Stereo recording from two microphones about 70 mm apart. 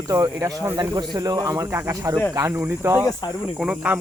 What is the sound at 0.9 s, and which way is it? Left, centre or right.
Speech, right.